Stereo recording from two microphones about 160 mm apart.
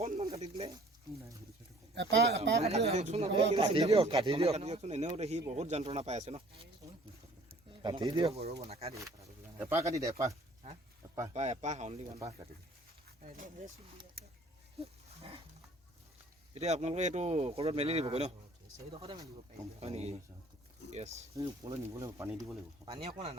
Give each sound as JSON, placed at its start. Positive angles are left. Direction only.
{"t": 0.0, "sound": "a sound", "side_deg": -40}
{"t": 2.0, "sound": "speech", "side_deg": -90}
{"t": 2.6, "sound": "speech", "side_deg": -40}
{"t": 7.7, "sound": "speech", "side_deg": -30}
{"t": 8.6, "sound": "speech", "side_deg": -40}
{"t": 8.9, "sound": "speech", "side_deg": -20}
{"t": 11.0, "sound": "a sound", "side_deg": -20}
{"t": 11.3, "sound": "speech", "side_deg": -45}
{"t": 13.2, "sound": "speech", "side_deg": -60}
{"t": 16.6, "sound": "speech", "side_deg": -45}
{"t": 21.9, "sound": "speech", "side_deg": -20}
{"t": 23.0, "sound": "speech", "side_deg": -40}